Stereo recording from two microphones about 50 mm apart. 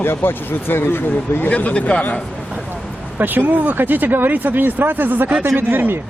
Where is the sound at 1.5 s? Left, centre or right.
Left.